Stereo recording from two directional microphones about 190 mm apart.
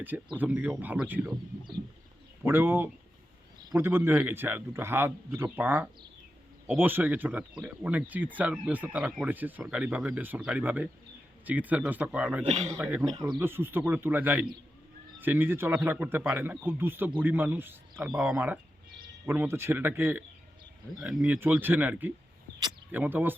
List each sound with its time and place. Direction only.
0.3 s speech: 10° right (ahead or behind)
2.4 s speech: 10° right (ahead or behind)
12.5 s a man's voice: 35° right (ahead or behind)
12.7 s speech: 10° right (ahead or behind)